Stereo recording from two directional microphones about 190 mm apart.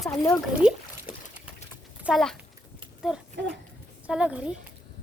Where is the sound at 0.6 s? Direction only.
5° right (ahead or behind).